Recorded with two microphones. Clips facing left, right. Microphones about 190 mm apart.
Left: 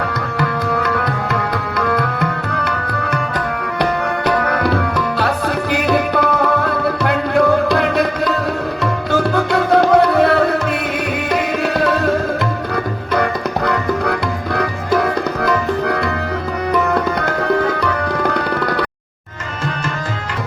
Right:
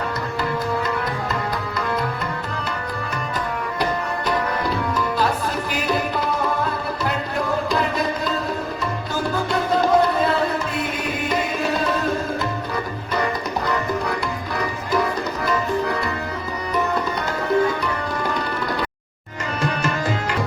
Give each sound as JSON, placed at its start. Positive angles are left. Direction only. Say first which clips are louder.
{"t": 0.3, "sound": "music", "louder": "left 4 dB", "side_deg": 70}
{"t": 4.3, "sound": "tabla", "louder": "left 6 dB", "side_deg": 70}
{"t": 5.7, "sound": "music", "louder": "left 8 dB", "side_deg": 65}
{"t": 11.3, "sound": "tabla", "louder": "left 4 dB", "side_deg": 65}
{"t": 13.7, "sound": "music", "louder": "left 5 dB", "side_deg": 65}
{"t": 16.9, "sound": "tabla", "louder": "left 6 dB", "side_deg": 65}